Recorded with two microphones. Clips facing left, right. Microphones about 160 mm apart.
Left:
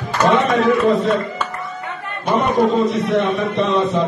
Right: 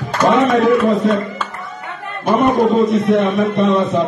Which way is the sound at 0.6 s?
45° right (ahead or behind).